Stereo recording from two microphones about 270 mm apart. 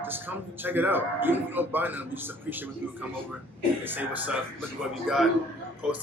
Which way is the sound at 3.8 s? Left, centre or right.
Centre.